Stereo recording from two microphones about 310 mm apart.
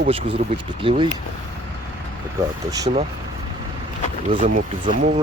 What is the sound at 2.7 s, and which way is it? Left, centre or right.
Speech, centre.